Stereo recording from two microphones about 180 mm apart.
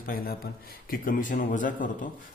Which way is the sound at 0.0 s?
55° left (ahead or behind).